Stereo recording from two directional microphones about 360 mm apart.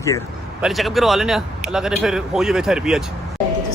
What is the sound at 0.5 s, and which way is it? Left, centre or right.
A man's voice, centre.